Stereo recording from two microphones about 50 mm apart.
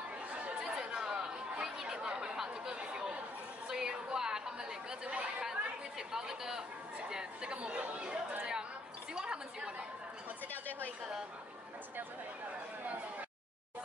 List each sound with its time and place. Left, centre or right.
0.6 s chatter: centre
3.6 s a sound: centre
5.0 s chatter: right
5.5 s chatter: centre
7.5 s chatter: right
9.1 s a sound: centre